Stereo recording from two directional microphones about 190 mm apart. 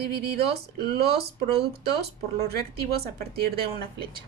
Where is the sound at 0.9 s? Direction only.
55° right (ahead or behind).